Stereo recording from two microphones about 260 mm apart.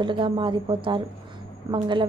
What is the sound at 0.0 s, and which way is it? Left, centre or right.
A woman's voice, centre.